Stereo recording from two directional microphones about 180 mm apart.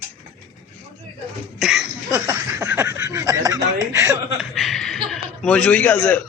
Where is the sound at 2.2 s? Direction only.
15° right (ahead or behind).